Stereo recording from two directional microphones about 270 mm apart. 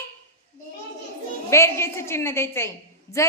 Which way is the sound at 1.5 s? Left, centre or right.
Centre.